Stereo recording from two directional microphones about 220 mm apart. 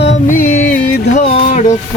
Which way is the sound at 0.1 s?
35° left (ahead or behind).